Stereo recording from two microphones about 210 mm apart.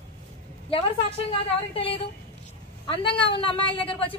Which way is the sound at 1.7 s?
25° left (ahead or behind).